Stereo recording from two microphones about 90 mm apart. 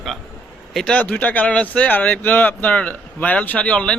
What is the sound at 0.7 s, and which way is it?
A man's voice, 10° left (ahead or behind).